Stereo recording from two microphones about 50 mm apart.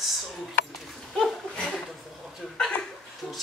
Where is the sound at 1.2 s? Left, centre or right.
Centre.